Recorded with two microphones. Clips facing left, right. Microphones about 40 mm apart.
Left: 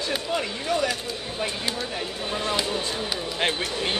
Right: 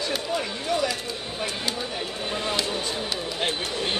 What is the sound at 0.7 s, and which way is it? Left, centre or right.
Speech, left.